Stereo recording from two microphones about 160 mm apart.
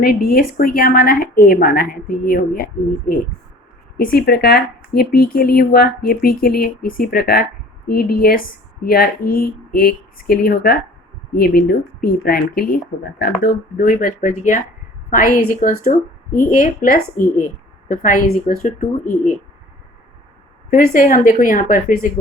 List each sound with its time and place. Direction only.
0.0 s a woman's voice: 70° left (ahead or behind)
3.9 s speech: 70° left (ahead or behind)
15.1 s a woman's voice: 65° left (ahead or behind)
20.7 s a woman's voice: 60° left (ahead or behind)